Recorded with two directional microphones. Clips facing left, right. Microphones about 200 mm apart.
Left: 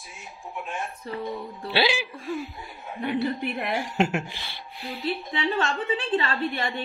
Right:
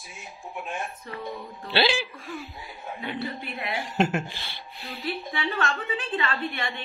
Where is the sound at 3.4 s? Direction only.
50° left (ahead or behind).